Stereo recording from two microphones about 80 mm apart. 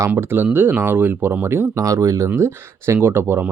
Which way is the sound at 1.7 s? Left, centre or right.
Right.